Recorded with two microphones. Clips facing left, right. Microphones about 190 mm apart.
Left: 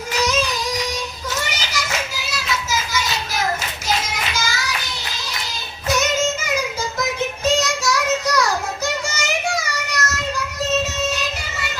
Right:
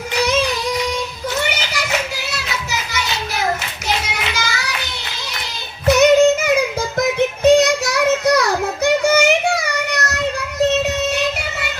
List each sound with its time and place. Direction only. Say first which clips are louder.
1.4 s a sound: right 5 dB; 60° right (ahead or behind)
3.8 s child singing: right 2 dB; 65° right (ahead or behind)
5.9 s child singing: right 10 dB; 60° right (ahead or behind)
8.8 s music: right 11 dB; 60° right (ahead or behind)